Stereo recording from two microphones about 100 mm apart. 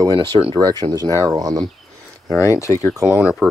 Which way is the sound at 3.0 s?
10° right (ahead or behind).